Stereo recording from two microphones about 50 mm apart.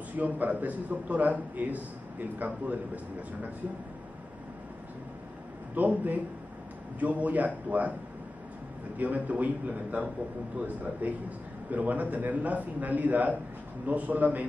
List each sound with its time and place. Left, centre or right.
0.2 s a man's voice: right
5.8 s a man's voice: right
8.9 s a man's voice: right